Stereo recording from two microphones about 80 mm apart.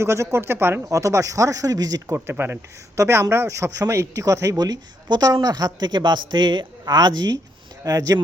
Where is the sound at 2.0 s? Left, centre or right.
Right.